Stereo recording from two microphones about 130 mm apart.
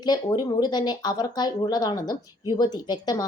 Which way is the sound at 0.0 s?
30° left (ahead or behind).